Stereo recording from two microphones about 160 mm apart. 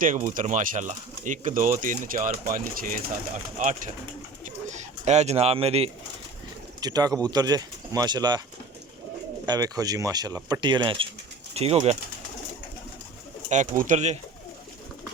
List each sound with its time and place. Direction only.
0.0 s speech: 50° right (ahead or behind)
4.4 s bird: 50° right (ahead or behind)
6.7 s speech: 25° right (ahead or behind)
9.5 s speech: 25° right (ahead or behind); by 11.9 s 40° right (ahead or behind)
13.5 s speech: 50° right (ahead or behind)